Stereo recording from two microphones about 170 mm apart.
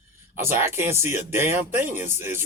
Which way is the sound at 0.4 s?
15° right (ahead or behind).